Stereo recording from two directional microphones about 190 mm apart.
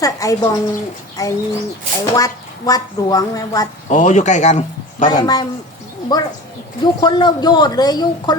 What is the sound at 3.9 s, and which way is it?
Speech, 40° left (ahead or behind).